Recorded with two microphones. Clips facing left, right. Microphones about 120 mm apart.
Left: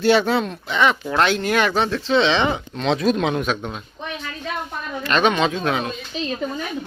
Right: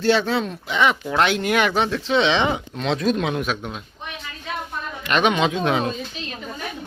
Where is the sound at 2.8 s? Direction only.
Centre (ahead or behind).